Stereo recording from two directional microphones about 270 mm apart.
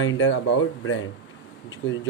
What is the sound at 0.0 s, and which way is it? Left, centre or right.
Speech, left.